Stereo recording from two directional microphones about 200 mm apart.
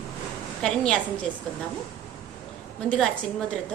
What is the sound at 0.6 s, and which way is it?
Speech, 5° left (ahead or behind).